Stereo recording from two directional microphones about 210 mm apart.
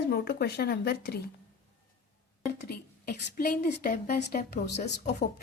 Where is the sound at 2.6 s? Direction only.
50° left (ahead or behind).